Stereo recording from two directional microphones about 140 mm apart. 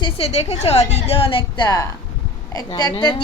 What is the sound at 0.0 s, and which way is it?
A woman's voice, 45° left (ahead or behind).